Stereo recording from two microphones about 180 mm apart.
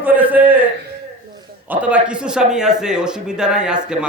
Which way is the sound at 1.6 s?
5° right (ahead or behind).